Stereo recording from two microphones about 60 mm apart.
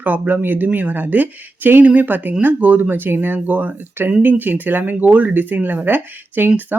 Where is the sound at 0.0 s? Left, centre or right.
Right.